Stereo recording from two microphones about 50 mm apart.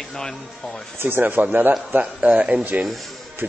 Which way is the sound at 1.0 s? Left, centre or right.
Right.